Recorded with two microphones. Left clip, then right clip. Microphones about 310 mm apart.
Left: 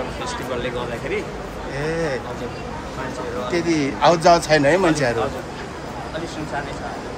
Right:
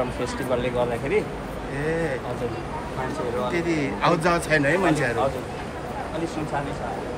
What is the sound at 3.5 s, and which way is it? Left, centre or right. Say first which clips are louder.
A man's voice: left 4 dB; centre.